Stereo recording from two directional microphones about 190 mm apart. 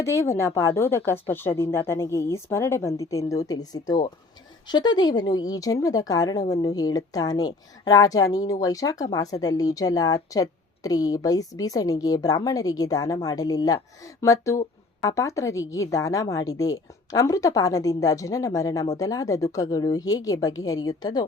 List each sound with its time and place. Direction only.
0.0 s a woman's voice: 15° left (ahead or behind)